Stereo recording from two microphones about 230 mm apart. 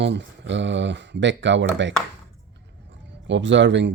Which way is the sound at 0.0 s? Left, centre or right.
Right.